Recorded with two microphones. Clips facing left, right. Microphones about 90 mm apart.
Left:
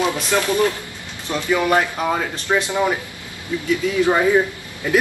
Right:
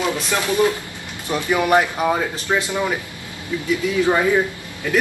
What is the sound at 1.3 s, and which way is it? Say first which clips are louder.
Speech: right 1 dB; 20° right (ahead or behind).